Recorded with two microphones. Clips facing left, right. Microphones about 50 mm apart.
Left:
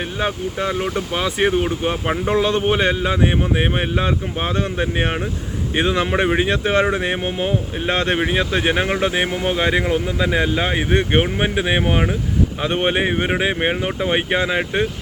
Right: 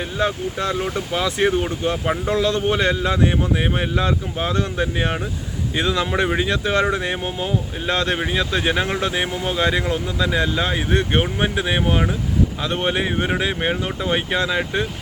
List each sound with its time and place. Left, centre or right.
0.2 s speech: left